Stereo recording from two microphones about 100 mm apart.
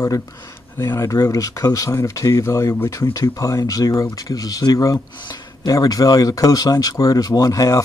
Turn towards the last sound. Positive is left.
turn(degrees=35)  # may be behind; listen again after turning